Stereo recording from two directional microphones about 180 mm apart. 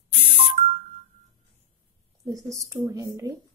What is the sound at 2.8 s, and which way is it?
Speech, 20° right (ahead or behind).